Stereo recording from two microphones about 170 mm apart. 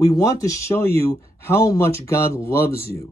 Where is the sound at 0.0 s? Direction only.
20° left (ahead or behind).